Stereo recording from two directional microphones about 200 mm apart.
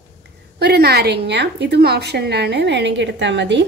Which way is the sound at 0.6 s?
55° right (ahead or behind).